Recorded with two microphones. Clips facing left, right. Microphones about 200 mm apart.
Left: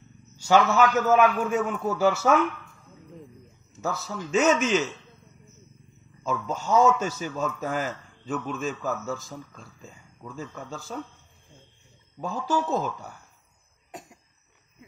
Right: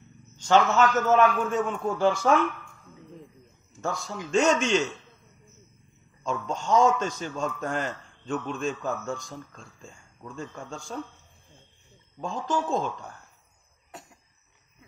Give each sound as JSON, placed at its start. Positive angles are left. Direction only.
{"t": 0.4, "sound": "a man's voice", "side_deg": 10}
{"t": 3.8, "sound": "a man's voice", "side_deg": 5}
{"t": 6.2, "sound": "a man's voice", "side_deg": 5}
{"t": 12.2, "sound": "a man's voice", "side_deg": 5}
{"t": 13.9, "sound": "cough", "side_deg": 15}